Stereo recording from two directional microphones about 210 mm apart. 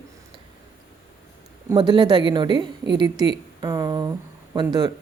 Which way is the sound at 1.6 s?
20° right (ahead or behind).